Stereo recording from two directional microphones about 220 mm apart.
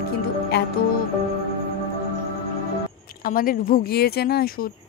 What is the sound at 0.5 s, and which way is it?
Speech, 50° left (ahead or behind).